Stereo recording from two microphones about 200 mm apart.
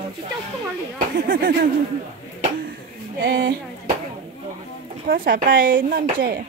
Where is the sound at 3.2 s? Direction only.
50° right (ahead or behind).